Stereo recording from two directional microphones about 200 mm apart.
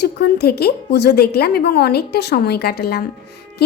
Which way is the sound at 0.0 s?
55° left (ahead or behind).